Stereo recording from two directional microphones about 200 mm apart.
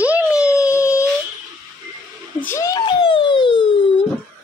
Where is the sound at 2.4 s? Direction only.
15° left (ahead or behind).